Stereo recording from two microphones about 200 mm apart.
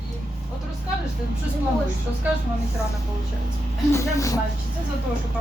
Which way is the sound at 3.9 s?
15° left (ahead or behind).